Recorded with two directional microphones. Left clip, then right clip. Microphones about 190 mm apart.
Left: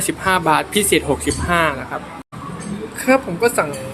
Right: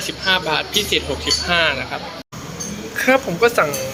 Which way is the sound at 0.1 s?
40° left (ahead or behind).